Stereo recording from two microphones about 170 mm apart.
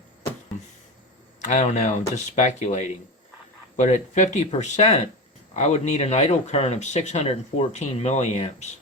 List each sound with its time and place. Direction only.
1.5 s speech: 45° left (ahead or behind)